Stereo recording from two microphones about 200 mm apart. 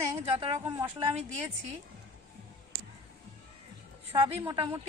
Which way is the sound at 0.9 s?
30° right (ahead or behind).